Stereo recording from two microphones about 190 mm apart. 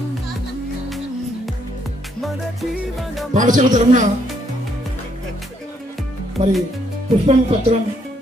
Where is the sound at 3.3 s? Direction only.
45° right (ahead or behind).